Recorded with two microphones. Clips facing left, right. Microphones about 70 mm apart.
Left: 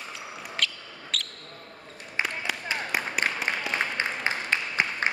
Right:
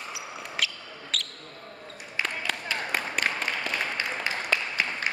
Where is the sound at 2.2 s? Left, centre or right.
Centre.